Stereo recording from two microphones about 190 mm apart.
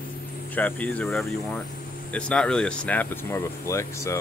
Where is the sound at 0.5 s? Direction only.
10° left (ahead or behind).